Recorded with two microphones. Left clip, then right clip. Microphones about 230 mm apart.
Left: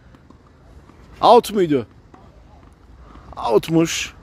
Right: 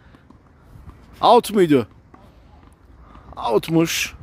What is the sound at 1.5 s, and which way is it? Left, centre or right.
Speech, centre.